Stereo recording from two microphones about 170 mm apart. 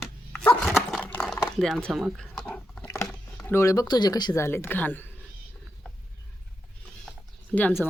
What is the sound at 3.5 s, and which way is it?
Speech, 15° left (ahead or behind).